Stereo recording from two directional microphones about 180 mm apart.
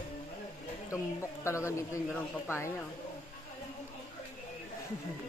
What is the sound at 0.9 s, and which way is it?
Speech, 15° left (ahead or behind).